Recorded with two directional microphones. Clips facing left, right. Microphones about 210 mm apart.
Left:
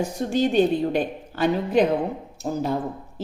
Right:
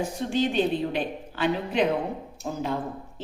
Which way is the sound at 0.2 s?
45° left (ahead or behind).